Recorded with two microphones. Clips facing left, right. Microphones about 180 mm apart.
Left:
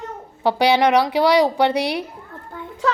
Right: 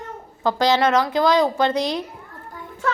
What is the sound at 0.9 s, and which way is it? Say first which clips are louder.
Speech: left 2 dB; 70° left (ahead or behind).